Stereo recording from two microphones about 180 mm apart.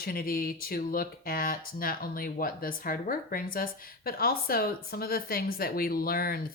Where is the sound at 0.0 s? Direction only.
55° left (ahead or behind).